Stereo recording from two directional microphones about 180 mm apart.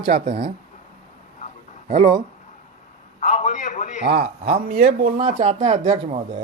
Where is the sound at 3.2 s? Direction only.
45° left (ahead or behind).